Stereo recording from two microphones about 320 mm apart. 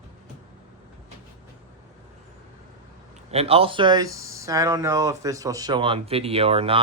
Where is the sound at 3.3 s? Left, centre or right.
Centre.